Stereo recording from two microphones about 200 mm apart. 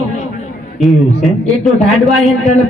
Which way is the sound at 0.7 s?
Centre (ahead or behind).